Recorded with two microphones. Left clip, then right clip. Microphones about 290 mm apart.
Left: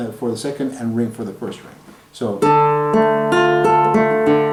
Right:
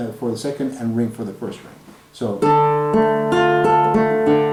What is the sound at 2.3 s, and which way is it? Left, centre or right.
Music, centre.